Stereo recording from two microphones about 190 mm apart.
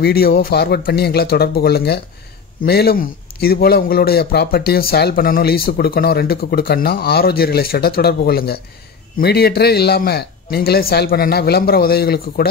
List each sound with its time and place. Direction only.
0.0 s a man's voice: 55° left (ahead or behind)